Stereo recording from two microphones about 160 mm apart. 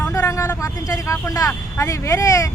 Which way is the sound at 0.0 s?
20° left (ahead or behind).